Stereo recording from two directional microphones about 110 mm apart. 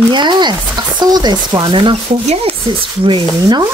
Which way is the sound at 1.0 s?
40° right (ahead or behind).